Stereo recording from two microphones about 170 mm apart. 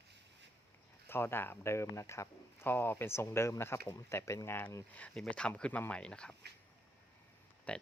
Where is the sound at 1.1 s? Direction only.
15° left (ahead or behind).